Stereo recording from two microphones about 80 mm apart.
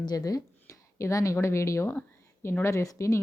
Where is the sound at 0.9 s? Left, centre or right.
Left.